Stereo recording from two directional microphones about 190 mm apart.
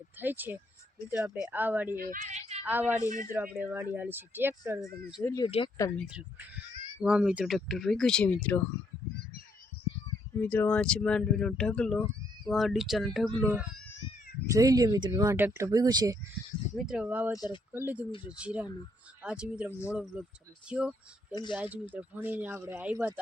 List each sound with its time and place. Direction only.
0.2 s speech: 10° right (ahead or behind)
2.0 s speech: 50° right (ahead or behind)
2.6 s speech: 10° right (ahead or behind)
3.1 s speech: 45° right (ahead or behind)
3.3 s speech: 10° right (ahead or behind)
5.2 s speech: 15° left (ahead or behind)
5.5 s speech: 30° left (ahead or behind)
6.0 s speech: 5° right (ahead or behind)
10.3 s speech: 10° left (ahead or behind); by 13.8 s 5° right (ahead or behind)
14.4 s speech: 15° right (ahead or behind)
16.7 s speech: 5° right (ahead or behind)
17.3 s speech: 20° left (ahead or behind)
17.7 s speech: 10° right (ahead or behind)